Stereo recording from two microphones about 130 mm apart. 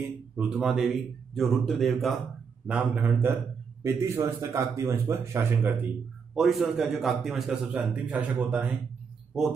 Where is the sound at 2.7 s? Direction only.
10° right (ahead or behind).